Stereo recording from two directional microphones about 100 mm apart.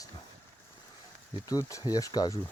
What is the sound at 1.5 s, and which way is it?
Speech, 35° left (ahead or behind).